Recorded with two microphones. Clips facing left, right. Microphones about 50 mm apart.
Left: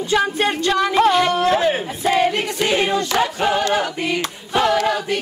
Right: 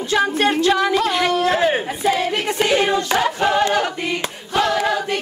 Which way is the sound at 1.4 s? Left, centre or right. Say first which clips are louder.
Even; centre.